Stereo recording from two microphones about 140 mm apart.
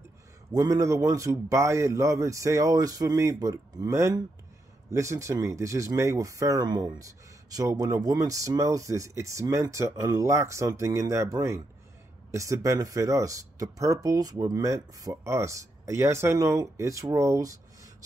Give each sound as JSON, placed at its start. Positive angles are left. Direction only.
{"t": 0.5, "sound": "speech", "side_deg": -25}